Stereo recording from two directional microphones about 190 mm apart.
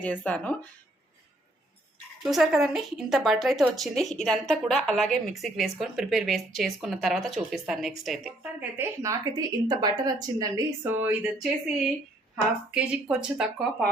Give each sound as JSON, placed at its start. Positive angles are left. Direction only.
{"t": 0.0, "sound": "speech", "side_deg": 10}
{"t": 2.2, "sound": "a woman's voice", "side_deg": 0}
{"t": 8.8, "sound": "a woman's voice", "side_deg": -15}